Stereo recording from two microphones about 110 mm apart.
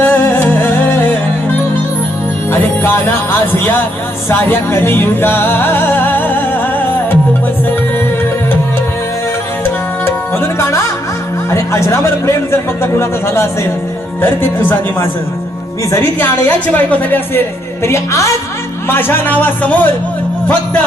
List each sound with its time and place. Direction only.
0.0 s music: 20° left (ahead or behind)
2.5 s music: 20° left (ahead or behind)
4.3 s music: 20° left (ahead or behind)
10.4 s music: 25° left (ahead or behind)
11.5 s a man's voice: 25° left (ahead or behind)
16.2 s a woman's voice: 15° left (ahead or behind)